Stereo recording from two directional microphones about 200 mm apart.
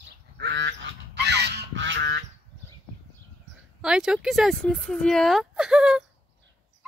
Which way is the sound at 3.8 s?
5° right (ahead or behind).